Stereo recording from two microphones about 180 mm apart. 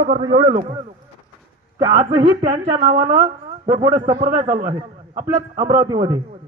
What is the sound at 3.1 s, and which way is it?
Speech, 25° right (ahead or behind).